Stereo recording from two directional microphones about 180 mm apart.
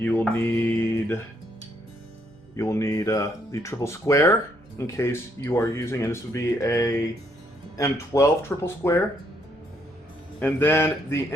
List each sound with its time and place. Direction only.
0.0 s mantra: 10° left (ahead or behind)
2.6 s speech: 15° left (ahead or behind)
10.4 s speech: 10° left (ahead or behind)